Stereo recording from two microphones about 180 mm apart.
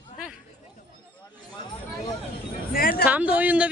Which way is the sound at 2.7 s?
55° left (ahead or behind).